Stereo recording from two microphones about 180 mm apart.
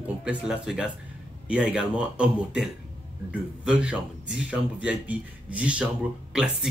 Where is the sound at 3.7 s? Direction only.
5° right (ahead or behind).